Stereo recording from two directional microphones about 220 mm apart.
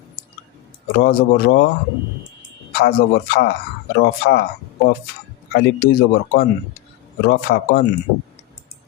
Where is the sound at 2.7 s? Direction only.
45° left (ahead or behind).